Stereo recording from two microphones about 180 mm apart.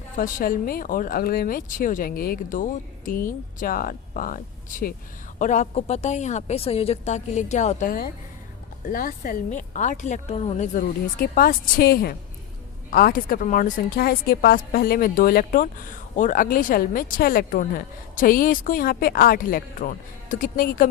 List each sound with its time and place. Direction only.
0.2 s a woman's voice: 50° left (ahead or behind)
10.8 s a woman's voice: 50° left (ahead or behind)